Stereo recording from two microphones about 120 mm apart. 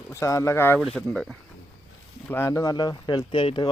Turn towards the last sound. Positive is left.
turn(degrees=45)  # may be behind; listen again after turning